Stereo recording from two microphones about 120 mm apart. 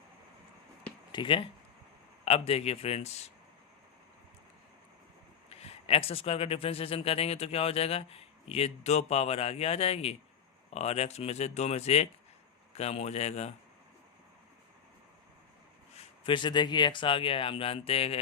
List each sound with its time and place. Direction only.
1.1 s speech: 45° left (ahead or behind)
2.2 s speech: 55° left (ahead or behind)
5.5 s speech: 55° left (ahead or behind)
16.0 s speech: 45° left (ahead or behind)